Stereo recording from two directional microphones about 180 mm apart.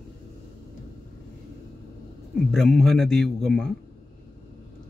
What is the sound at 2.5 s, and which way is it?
A man's voice, centre (ahead or behind).